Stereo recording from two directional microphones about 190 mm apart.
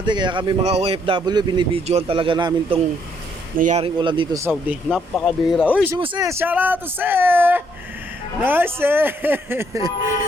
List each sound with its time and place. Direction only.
0.0 s speech: 25° right (ahead or behind)
3.6 s speech: 35° right (ahead or behind); by 4.8 s 15° right (ahead or behind)
4.9 s speech: centre (ahead or behind); by 9.9 s 15° right (ahead or behind)